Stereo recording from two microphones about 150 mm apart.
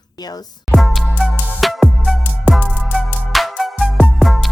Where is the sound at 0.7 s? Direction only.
Centre (ahead or behind).